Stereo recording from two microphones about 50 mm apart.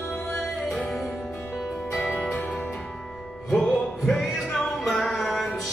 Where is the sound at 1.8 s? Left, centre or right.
Centre.